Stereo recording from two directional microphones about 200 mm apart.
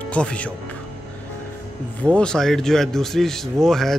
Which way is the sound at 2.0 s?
5° left (ahead or behind).